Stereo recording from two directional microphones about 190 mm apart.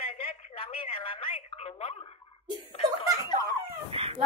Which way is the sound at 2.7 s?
25° left (ahead or behind).